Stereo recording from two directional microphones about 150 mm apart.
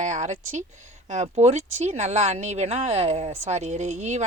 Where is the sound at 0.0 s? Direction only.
55° right (ahead or behind).